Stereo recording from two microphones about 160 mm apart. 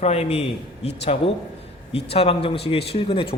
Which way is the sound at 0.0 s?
40° left (ahead or behind).